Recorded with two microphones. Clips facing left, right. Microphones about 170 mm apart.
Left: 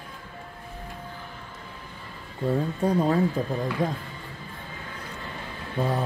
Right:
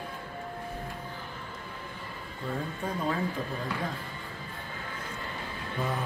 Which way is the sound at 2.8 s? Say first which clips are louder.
Left 9 dB; 40° left (ahead or behind).